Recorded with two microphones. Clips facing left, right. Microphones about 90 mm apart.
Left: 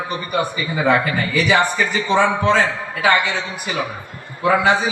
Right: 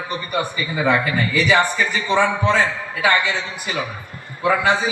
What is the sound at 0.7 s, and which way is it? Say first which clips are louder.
A man's voice: left 1 dB; 15° left (ahead or behind).